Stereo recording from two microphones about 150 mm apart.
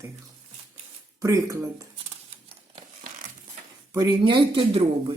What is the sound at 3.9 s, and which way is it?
Speech, 30° right (ahead or behind).